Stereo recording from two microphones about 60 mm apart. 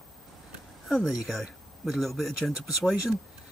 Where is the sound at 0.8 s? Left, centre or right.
Centre.